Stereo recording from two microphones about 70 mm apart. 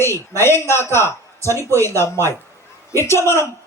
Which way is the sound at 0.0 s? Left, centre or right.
Left.